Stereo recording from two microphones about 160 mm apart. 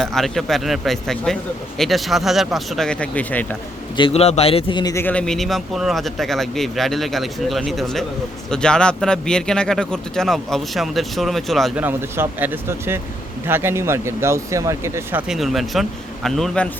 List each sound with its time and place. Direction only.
0.0 s speech: centre (ahead or behind)
3.9 s speech: 35° left (ahead or behind)
4.8 s speech: 20° left (ahead or behind)
5.0 s speech: 5° left (ahead or behind)
11.8 s speech: 15° right (ahead or behind)
15.3 s speech: centre (ahead or behind)